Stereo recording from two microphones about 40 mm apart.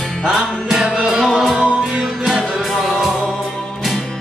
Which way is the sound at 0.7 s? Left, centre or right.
Centre.